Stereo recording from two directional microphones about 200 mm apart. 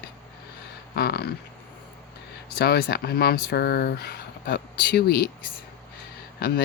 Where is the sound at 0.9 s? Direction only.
50° left (ahead or behind).